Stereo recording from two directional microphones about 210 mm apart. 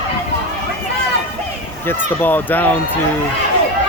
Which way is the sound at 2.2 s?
10° left (ahead or behind).